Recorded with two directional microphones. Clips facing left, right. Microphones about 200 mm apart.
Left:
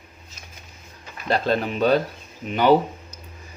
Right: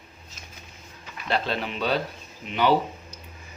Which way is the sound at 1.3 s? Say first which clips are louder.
Left 5 dB; 45° left (ahead or behind).